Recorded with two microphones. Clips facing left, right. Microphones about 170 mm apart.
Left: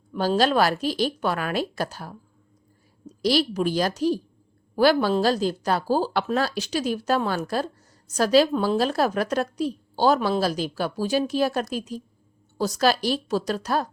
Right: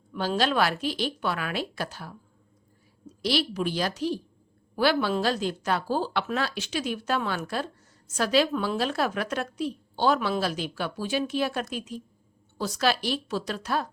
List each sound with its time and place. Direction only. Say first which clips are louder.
0.1 s a woman's voice: left 5 dB; 40° left (ahead or behind)